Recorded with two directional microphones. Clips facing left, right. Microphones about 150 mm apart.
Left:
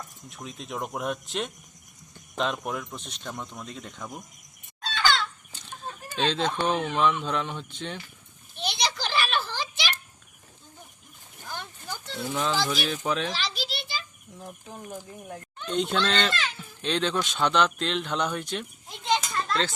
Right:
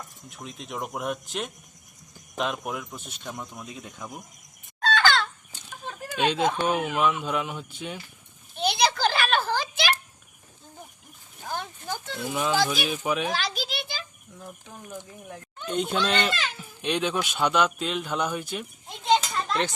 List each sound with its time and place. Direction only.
0.3 s speech: centre (ahead or behind)
4.8 s fowl: 50° right (ahead or behind)
6.1 s speech: 10° right (ahead or behind)
8.5 s a sound: 55° right (ahead or behind)
11.4 s a sound: 50° right (ahead or behind)
12.3 s speech: 10° right (ahead or behind)
13.2 s a sound: 50° right (ahead or behind)
14.3 s speech: 30° left (ahead or behind)
15.6 s speech: 5° right (ahead or behind)